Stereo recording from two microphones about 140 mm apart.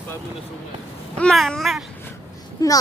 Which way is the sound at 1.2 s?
5° left (ahead or behind).